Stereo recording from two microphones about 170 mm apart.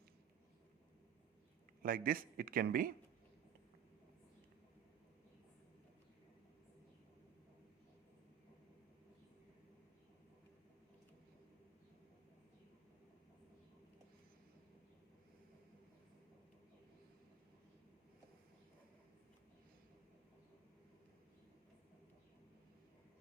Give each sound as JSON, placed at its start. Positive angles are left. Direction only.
{"t": 1.8, "sound": "a man's voice", "side_deg": -55}